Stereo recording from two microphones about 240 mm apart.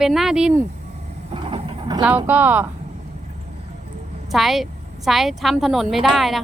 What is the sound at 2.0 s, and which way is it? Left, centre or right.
Speech, centre.